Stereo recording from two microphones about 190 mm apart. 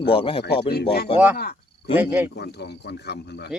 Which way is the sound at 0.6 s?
55° left (ahead or behind).